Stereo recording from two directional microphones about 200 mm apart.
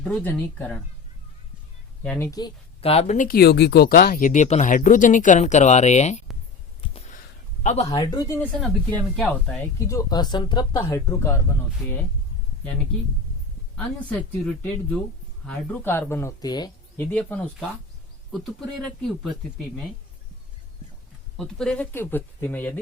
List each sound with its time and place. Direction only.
0.0 s speech: 5° left (ahead or behind)
2.0 s speech: 10° left (ahead or behind); by 6.2 s 35° left (ahead or behind)
6.8 s a sound: 30° left (ahead or behind)
7.6 s speech: 35° left (ahead or behind)
7.9 s speech: 15° left (ahead or behind)
13.7 s speech: 5° left (ahead or behind)
21.3 s speech: 5° left (ahead or behind)